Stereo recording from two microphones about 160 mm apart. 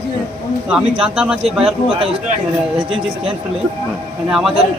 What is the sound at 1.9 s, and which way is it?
Speech, 35° right (ahead or behind).